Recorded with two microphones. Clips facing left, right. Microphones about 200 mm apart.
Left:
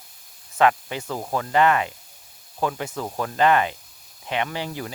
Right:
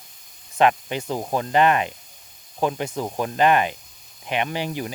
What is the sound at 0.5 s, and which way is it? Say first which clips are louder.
Speech: right 1 dB; 20° right (ahead or behind).